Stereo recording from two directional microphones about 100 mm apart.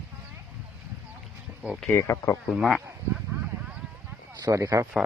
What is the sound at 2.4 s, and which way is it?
Speech, centre (ahead or behind).